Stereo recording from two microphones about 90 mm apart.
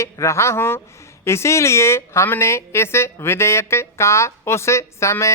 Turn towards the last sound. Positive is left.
turn(degrees=30)  # may be behind; listen again after turning